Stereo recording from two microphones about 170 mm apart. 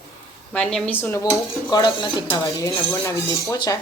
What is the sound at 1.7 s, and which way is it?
Speech, 25° left (ahead or behind).